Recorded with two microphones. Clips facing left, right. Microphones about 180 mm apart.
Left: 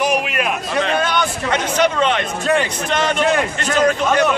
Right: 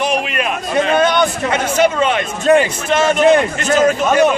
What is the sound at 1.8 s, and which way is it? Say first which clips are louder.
A man's voice: right 3 dB; 10° right (ahead or behind).